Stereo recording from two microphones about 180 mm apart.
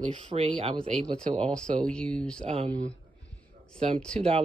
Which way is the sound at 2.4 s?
35° right (ahead or behind).